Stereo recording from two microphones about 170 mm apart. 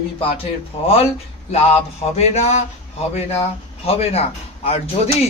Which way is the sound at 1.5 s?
40° left (ahead or behind).